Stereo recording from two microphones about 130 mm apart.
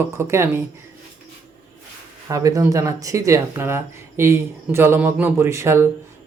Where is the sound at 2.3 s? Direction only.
25° right (ahead or behind).